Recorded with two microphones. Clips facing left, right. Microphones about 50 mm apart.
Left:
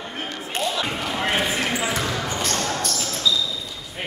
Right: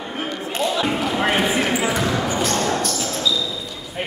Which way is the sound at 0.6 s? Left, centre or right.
Centre.